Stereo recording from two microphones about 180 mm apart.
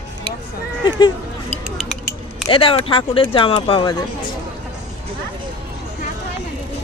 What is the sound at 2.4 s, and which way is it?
Speech, 30° left (ahead or behind).